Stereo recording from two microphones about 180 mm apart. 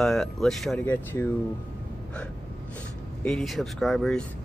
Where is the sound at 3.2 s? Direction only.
5° left (ahead or behind).